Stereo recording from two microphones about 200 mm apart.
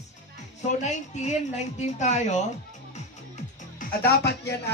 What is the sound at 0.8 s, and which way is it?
A woman's voice, 35° left (ahead or behind).